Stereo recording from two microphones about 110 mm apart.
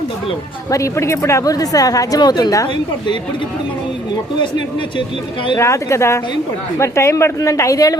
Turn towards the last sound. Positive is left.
turn(degrees=30)  # may be behind; listen again after turning